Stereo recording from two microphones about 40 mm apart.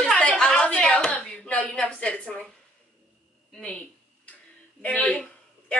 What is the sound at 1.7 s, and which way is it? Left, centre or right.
Speech, left.